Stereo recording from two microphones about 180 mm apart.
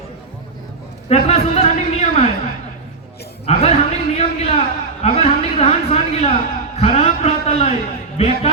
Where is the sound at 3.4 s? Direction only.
35° left (ahead or behind).